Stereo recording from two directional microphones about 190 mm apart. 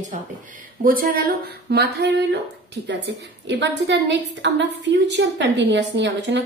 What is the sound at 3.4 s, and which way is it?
A woman's voice, 65° right (ahead or behind).